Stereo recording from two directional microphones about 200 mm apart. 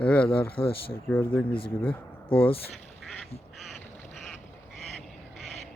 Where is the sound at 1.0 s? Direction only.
10° left (ahead or behind).